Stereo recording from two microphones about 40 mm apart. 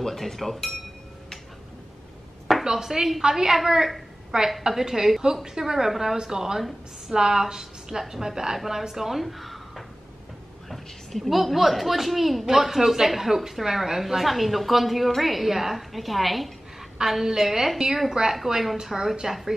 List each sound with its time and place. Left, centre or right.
0.0 s speech: centre
2.6 s a woman's voice: centre
17.0 s a woman's voice: centre